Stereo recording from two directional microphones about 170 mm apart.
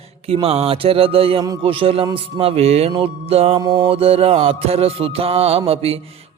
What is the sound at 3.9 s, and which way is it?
Speech, 35° right (ahead or behind).